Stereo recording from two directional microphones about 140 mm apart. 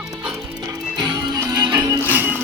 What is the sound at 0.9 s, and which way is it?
Music, 30° right (ahead or behind).